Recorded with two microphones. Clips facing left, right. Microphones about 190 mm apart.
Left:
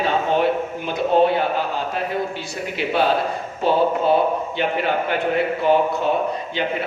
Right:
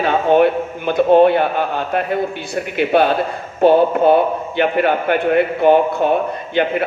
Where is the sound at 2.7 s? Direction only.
60° right (ahead or behind).